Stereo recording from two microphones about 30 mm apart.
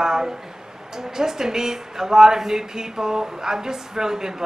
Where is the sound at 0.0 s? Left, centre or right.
Centre.